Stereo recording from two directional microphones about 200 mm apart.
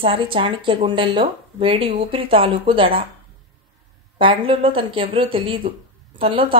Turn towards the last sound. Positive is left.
turn(degrees=-25)  # may be behind; listen again after turning